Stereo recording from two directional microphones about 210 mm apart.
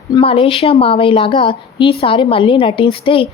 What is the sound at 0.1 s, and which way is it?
Speech, 25° left (ahead or behind).